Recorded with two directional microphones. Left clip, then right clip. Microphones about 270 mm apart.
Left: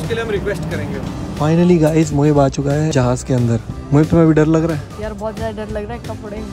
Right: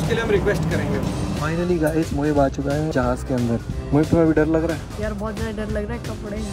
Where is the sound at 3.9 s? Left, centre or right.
Right.